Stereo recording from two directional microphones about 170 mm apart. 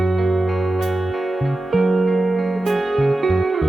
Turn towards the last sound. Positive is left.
turn(degrees=0)  # may be behind; listen again after turning